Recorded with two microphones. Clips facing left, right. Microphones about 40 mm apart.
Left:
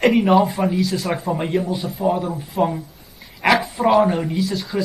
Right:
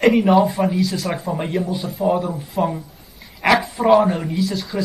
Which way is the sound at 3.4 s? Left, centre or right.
Centre.